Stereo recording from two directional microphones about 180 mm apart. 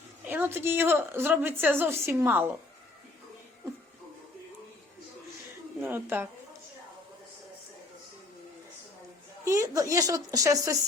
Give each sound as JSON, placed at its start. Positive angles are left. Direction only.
{"t": 0.3, "sound": "a woman's voice", "side_deg": -10}
{"t": 5.8, "sound": "a woman's voice", "side_deg": -10}
{"t": 9.4, "sound": "a woman's voice", "side_deg": -15}